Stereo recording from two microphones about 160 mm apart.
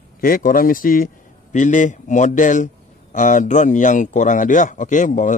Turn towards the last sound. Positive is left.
turn(degrees=50)  # may be behind; listen again after turning